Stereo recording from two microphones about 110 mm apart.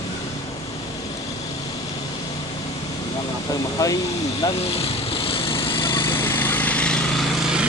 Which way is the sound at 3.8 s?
35° left (ahead or behind).